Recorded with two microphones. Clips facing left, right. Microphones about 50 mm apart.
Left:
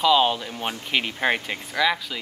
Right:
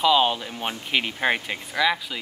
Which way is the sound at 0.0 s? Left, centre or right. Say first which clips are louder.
Left 1 dB; centre.